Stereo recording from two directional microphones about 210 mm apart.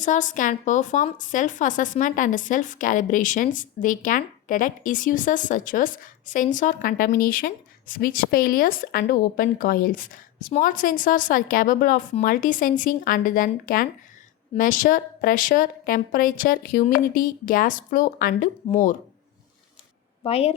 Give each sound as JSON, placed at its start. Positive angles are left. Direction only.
{"t": 0.0, "sound": "speech", "side_deg": 35}
{"t": 20.2, "sound": "a woman's voice", "side_deg": 30}